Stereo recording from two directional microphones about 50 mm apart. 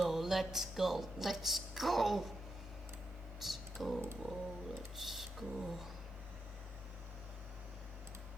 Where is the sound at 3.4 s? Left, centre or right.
Centre.